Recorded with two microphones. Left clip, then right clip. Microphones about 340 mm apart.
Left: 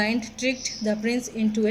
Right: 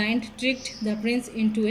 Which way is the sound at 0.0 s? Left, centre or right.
Centre.